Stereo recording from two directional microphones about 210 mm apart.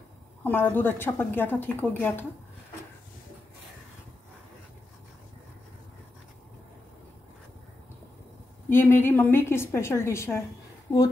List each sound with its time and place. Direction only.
0.4 s a woman's voice: 10° left (ahead or behind)
8.6 s a woman's voice: 10° left (ahead or behind)